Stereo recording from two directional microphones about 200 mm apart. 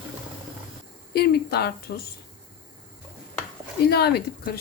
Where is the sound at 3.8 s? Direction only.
55° left (ahead or behind).